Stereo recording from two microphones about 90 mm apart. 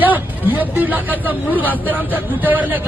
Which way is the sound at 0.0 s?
20° right (ahead or behind).